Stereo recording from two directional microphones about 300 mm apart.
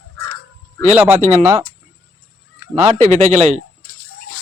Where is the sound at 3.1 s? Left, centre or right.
Right.